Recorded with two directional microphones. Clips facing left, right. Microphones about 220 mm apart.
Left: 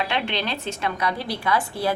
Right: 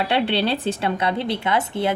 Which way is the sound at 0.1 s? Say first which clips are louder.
Right 6 dB; 35° right (ahead or behind).